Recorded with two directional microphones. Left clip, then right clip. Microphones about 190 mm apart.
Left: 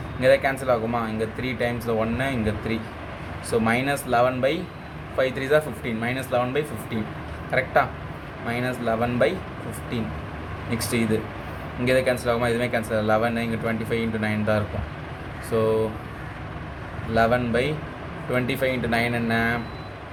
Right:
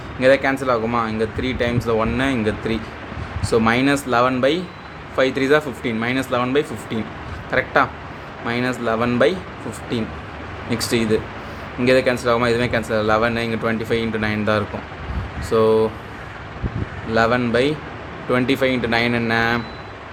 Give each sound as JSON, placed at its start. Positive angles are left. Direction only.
{"t": 0.2, "sound": "speech", "side_deg": -30}
{"t": 10.7, "sound": "speech", "side_deg": -30}
{"t": 17.2, "sound": "speech", "side_deg": -30}